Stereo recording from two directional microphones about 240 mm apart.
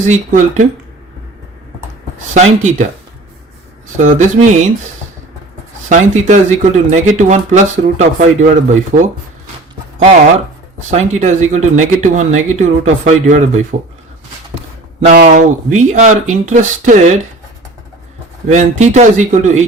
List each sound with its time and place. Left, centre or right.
0.1 s speech: right
2.3 s speech: right
3.9 s speech: right
5.9 s speech: right
10.8 s speech: right
15.0 s speech: right
18.4 s speech: right